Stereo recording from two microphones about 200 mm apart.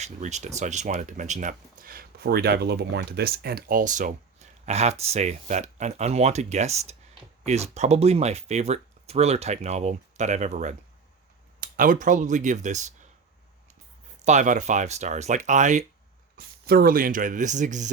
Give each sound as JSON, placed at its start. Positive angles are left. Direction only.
{"t": 0.0, "sound": "speech", "side_deg": -35}
{"t": 14.3, "sound": "speech", "side_deg": -35}
{"t": 16.4, "sound": "speech", "side_deg": -50}